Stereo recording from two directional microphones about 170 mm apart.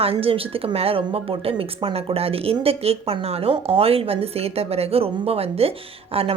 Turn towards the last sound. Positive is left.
turn(degrees=-35)  # may be behind; listen again after turning